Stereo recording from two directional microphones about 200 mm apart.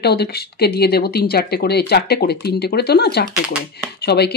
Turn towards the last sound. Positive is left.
turn(degrees=55)  # may be behind; listen again after turning